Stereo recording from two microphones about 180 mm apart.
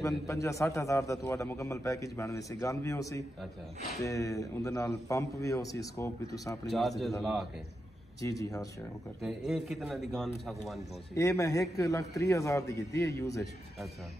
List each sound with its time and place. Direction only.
0.0 s a man's voice: 15° left (ahead or behind)
6.7 s a man's voice: centre (ahead or behind)
8.2 s speech: 20° left (ahead or behind)
9.5 s a man's voice: centre (ahead or behind)
11.1 s a man's voice: 20° left (ahead or behind)